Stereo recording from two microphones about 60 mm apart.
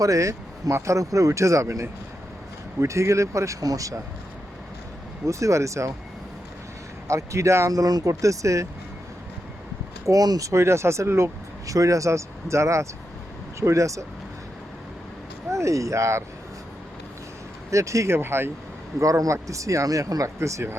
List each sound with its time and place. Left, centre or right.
0.0 s speech: right
5.2 s speech: right
7.1 s speech: right
7.7 s speech: right
10.1 s speech: right
10.5 s speech: right
11.6 s speech: right
15.4 s speech: right
17.7 s speech: right
18.2 s speech: right
18.9 s speech: right
20.4 s speech: right